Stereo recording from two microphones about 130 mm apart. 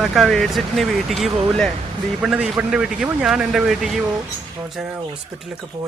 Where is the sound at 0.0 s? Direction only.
Centre (ahead or behind).